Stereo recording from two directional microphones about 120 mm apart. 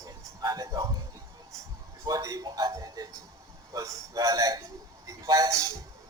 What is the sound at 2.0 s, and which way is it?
A man's voice, 30° right (ahead or behind).